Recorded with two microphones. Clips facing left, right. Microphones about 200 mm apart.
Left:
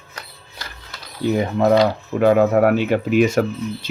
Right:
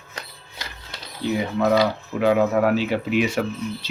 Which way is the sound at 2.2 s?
50° left (ahead or behind).